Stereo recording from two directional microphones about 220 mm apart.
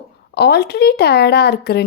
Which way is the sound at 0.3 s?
50° left (ahead or behind).